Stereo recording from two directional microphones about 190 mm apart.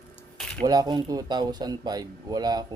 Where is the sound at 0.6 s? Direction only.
20° right (ahead or behind).